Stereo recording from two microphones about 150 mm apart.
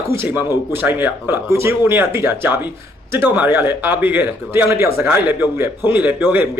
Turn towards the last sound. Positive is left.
turn(degrees=-10)  # may be behind; listen again after turning